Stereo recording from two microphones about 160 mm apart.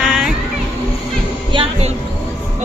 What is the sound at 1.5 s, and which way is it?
Speech, 40° right (ahead or behind).